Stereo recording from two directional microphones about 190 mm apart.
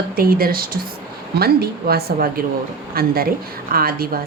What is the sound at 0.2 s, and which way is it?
A woman's voice, 50° right (ahead or behind).